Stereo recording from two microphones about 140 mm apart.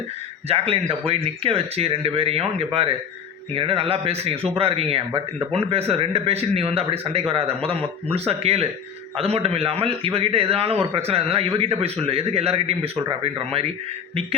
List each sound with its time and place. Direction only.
0.4 s a man's voice: 45° right (ahead or behind)